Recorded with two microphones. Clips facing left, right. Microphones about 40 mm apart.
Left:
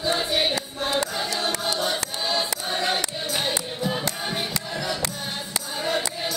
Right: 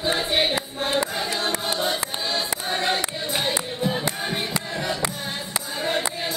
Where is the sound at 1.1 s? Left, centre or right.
Right.